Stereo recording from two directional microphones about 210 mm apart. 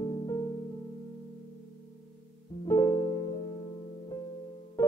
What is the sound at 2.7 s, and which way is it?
Music, 15° left (ahead or behind).